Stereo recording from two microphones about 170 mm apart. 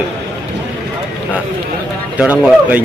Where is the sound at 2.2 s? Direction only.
10° right (ahead or behind).